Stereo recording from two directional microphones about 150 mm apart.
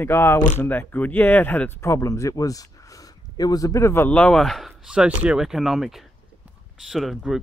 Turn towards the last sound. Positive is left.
turn(degrees=0)  # may be behind; listen again after turning